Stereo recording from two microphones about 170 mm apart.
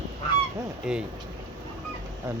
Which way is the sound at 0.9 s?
5° right (ahead or behind).